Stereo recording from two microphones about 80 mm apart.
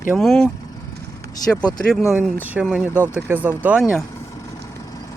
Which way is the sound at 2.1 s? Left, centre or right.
Centre.